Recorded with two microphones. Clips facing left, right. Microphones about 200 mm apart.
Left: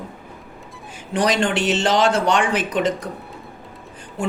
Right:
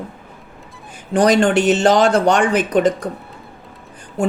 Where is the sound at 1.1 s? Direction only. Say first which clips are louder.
Right 6 dB; 45° right (ahead or behind).